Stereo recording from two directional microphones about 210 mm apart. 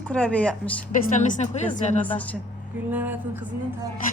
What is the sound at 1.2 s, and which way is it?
Speech, 35° left (ahead or behind).